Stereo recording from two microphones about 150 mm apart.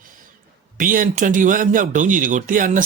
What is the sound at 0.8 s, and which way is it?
A man's voice, 65° right (ahead or behind).